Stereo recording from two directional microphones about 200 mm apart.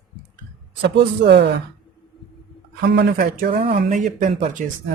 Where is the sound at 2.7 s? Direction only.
55° right (ahead or behind).